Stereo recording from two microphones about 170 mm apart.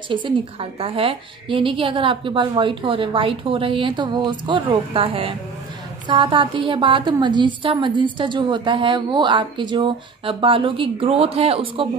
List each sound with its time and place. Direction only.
0.1 s a woman's voice: 30° right (ahead or behind)